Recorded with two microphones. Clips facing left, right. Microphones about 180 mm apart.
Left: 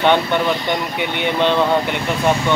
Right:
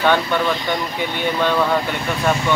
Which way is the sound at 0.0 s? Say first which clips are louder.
Left 2 dB; 20° left (ahead or behind).